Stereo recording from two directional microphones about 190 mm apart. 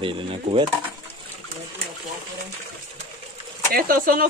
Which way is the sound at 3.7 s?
50° right (ahead or behind).